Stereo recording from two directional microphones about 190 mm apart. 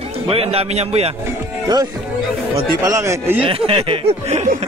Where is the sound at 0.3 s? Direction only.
30° right (ahead or behind).